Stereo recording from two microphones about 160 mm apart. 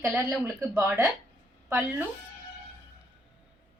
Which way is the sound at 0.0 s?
10° right (ahead or behind).